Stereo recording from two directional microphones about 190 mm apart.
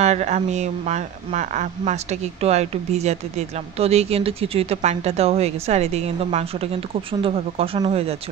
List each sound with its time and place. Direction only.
0.0 s speech: 35° right (ahead or behind)